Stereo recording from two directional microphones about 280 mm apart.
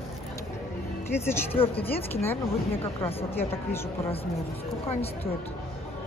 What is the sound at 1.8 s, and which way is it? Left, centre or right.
Speech, centre.